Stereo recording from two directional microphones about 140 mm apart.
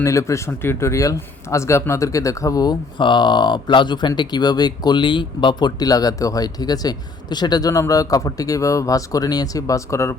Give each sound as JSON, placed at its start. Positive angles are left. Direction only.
{"t": 0.0, "sound": "speech", "side_deg": 20}